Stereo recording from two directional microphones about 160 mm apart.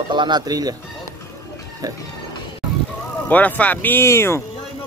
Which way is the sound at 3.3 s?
10° left (ahead or behind).